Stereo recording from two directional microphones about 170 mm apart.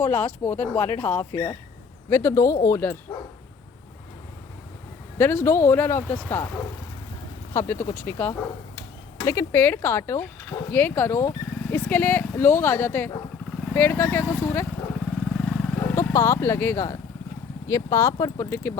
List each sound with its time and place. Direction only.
0.0 s speech: 10° left (ahead or behind)
5.1 s speech: 10° left (ahead or behind)
7.5 s speech: 15° left (ahead or behind)
15.4 s vehicle: centre (ahead or behind)
15.8 s speech: 15° left (ahead or behind)